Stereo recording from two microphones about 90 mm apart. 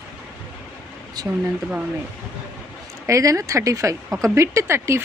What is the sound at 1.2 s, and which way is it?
Speech, 45° right (ahead or behind).